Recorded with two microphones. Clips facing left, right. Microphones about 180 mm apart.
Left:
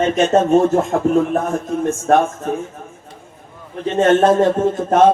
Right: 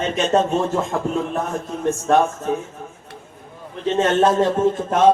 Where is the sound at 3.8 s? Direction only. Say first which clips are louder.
Left 4 dB; 50° left (ahead or behind).